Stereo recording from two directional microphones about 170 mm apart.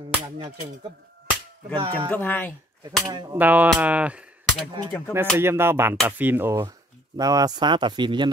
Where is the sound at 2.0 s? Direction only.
10° left (ahead or behind).